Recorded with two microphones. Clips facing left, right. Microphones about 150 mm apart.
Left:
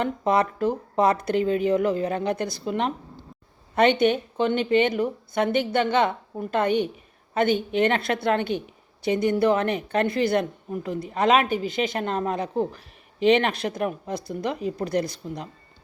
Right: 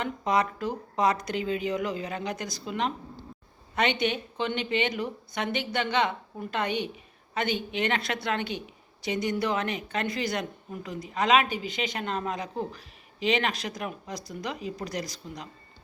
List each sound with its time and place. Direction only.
0.0 s a woman's voice: 55° left (ahead or behind)